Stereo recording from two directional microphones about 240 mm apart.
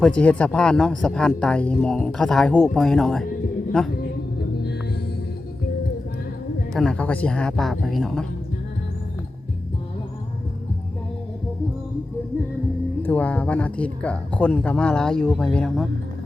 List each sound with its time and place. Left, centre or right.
0.0 s speech: centre
3.9 s music: left
6.7 s speech: centre
13.0 s speech: centre